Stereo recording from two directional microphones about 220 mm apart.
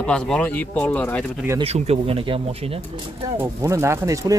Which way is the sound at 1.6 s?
30° right (ahead or behind).